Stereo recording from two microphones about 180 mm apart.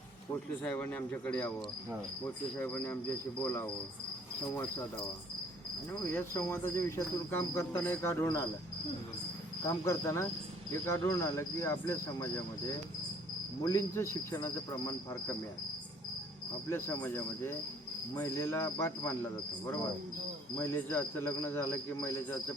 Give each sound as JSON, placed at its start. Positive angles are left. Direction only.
{"t": 0.6, "sound": "speech", "side_deg": 10}
{"t": 5.9, "sound": "speech", "side_deg": 15}
{"t": 9.6, "sound": "speech", "side_deg": 15}
{"t": 13.6, "sound": "speech", "side_deg": 15}
{"t": 16.6, "sound": "speech", "side_deg": 15}
{"t": 20.6, "sound": "speech", "side_deg": 15}